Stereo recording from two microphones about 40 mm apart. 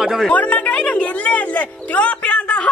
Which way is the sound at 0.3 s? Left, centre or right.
Left.